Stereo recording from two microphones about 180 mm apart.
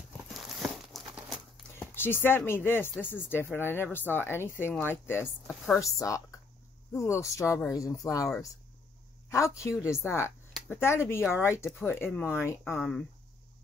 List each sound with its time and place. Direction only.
0.3 s a sound: centre (ahead or behind)
1.8 s speech: 10° left (ahead or behind)
9.3 s speech: 15° left (ahead or behind)